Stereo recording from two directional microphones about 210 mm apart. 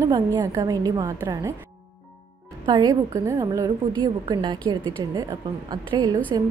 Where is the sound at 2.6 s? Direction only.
20° right (ahead or behind).